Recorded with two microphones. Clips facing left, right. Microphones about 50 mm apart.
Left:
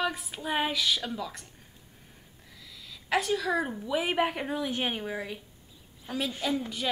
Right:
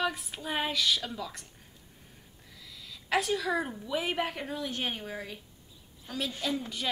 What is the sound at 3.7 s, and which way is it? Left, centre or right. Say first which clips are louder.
A woman's voice: left 3 dB; centre.